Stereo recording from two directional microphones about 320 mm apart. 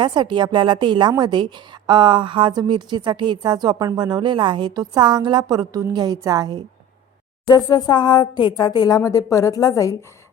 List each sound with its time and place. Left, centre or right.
0.0 s a woman's voice: centre
7.4 s speech: centre